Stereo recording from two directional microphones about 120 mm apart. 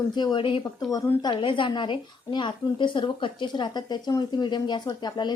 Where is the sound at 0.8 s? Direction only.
30° left (ahead or behind).